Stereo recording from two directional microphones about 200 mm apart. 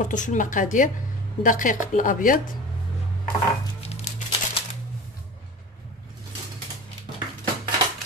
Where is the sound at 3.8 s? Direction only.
30° left (ahead or behind).